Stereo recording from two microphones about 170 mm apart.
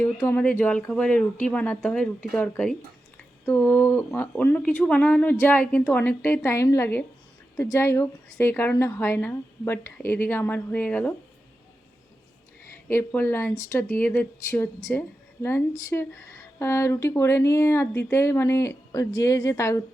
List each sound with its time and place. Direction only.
0.0 s speech: 15° left (ahead or behind)
12.9 s speech: 15° left (ahead or behind)